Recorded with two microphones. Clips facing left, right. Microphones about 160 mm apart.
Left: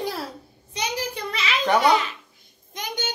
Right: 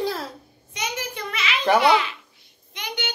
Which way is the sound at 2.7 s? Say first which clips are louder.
Left 1 dB; 45° left (ahead or behind).